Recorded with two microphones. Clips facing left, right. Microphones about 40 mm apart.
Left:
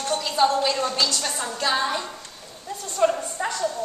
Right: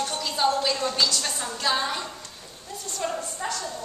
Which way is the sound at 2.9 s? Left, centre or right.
Left.